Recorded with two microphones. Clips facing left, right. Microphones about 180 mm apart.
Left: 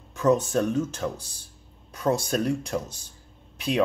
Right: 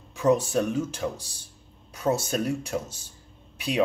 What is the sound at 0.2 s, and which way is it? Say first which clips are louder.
Speech: even; 10° right (ahead or behind).